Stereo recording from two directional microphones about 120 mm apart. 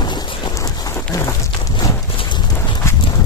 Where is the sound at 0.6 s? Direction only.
25° left (ahead or behind).